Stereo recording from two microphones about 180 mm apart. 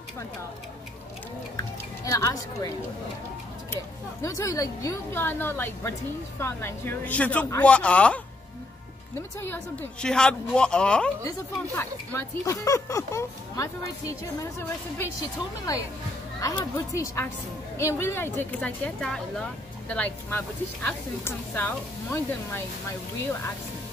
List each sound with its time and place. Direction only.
1.6 s speech: 15° left (ahead or behind)
3.7 s speech: 15° left (ahead or behind)
10.0 s speech: 5° left (ahead or behind)
16.3 s speech: 20° left (ahead or behind)